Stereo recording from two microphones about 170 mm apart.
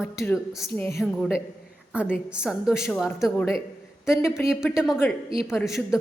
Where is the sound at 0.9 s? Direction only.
Centre (ahead or behind).